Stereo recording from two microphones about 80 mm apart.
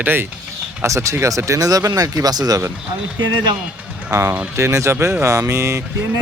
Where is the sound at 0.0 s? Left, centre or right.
Right.